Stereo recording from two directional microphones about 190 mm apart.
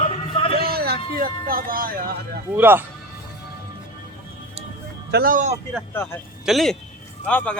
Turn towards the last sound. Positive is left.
turn(degrees=5)  # may be behind; listen again after turning